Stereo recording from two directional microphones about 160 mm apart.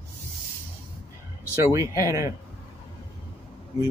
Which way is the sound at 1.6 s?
20° right (ahead or behind).